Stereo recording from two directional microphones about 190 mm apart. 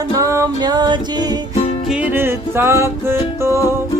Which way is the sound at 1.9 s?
10° right (ahead or behind).